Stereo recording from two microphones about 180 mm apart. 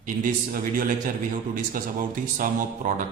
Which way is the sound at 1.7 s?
50° right (ahead or behind).